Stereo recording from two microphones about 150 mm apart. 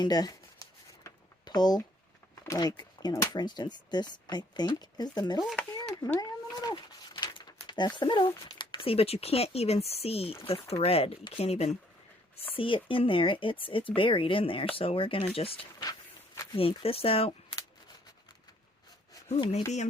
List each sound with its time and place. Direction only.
0.0 s writing: 25° left (ahead or behind)
2.3 s speech: 25° left (ahead or behind)
5.7 s a sound: 25° left (ahead or behind)
6.1 s speech: 25° left (ahead or behind)
15.8 s a sound: 20° left (ahead or behind)
16.6 s speech: 40° left (ahead or behind)